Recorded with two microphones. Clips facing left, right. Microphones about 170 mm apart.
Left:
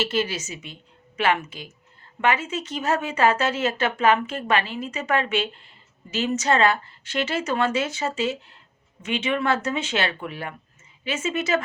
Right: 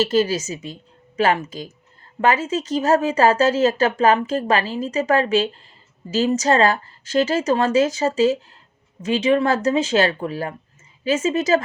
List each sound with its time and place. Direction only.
0.0 s speech: 40° right (ahead or behind)